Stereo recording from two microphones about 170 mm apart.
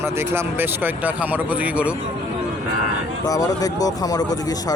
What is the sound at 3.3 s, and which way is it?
Speech, 20° left (ahead or behind).